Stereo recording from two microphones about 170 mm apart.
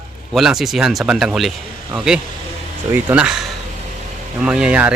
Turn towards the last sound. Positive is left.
turn(degrees=-5)  # may be behind; listen again after turning